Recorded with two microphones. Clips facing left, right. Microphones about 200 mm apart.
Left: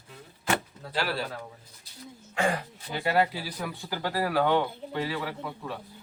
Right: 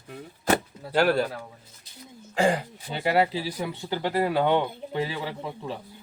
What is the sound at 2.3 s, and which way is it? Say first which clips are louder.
Speech: right 5 dB; 30° right (ahead or behind).